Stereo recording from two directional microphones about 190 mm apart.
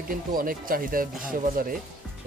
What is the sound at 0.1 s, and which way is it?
Speech, 50° right (ahead or behind).